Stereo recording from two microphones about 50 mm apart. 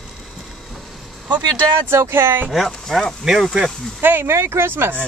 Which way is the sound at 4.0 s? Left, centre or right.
Right.